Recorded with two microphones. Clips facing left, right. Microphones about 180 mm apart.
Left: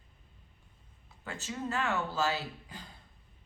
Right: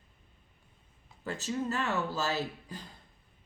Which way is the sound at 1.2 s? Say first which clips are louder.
Right 5 dB; 40° right (ahead or behind).